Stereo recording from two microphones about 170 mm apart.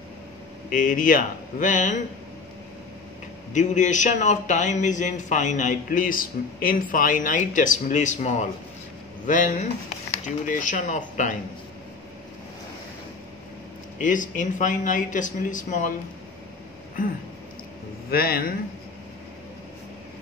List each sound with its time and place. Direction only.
0.7 s a man's voice: 50° left (ahead or behind)
3.5 s a man's voice: 45° left (ahead or behind)
13.9 s a man's voice: 50° left (ahead or behind)
18.1 s a man's voice: 60° left (ahead or behind)